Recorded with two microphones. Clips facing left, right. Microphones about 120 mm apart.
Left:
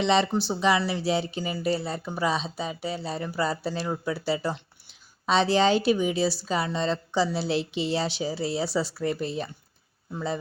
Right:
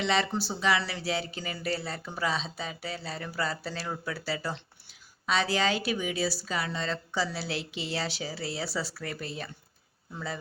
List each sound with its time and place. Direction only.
0.0 s speech: 20° left (ahead or behind)